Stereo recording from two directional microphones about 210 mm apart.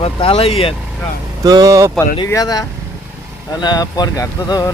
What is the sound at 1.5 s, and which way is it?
Speech, 15° right (ahead or behind).